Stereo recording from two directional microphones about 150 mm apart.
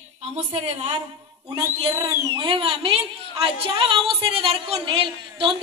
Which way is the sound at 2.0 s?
30° right (ahead or behind).